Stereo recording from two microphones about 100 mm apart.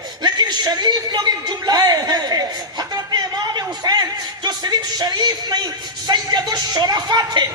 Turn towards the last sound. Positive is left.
turn(degrees=-45)  # may be behind; listen again after turning